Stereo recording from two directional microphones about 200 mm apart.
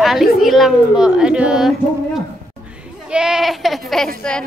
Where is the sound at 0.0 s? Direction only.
Centre (ahead or behind).